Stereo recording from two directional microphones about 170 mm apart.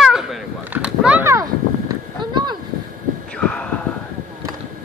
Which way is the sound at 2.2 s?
25° right (ahead or behind).